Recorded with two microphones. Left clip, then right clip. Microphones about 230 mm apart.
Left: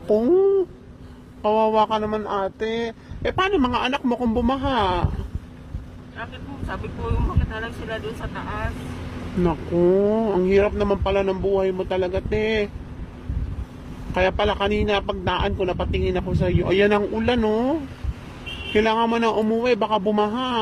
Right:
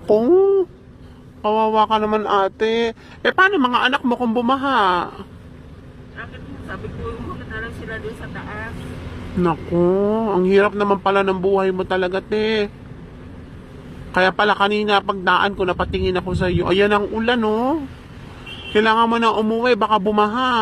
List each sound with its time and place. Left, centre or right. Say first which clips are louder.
0.1 s a sound: right 4 dB; right
1.4 s a man's voice: right 2 dB; centre
2.0 s a sound: right 7 dB; right
3.3 s a man's voice: right 5 dB; centre
7.5 s speech: right 3 dB; centre
9.4 s a man's voice: right 2 dB; centre
14.1 s a man's voice: right 5 dB; centre